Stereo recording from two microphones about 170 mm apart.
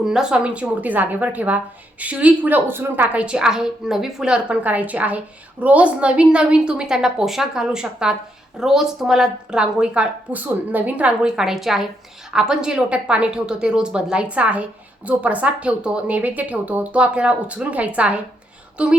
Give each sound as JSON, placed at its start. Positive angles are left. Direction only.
{"t": 0.0, "sound": "a woman's voice", "side_deg": -5}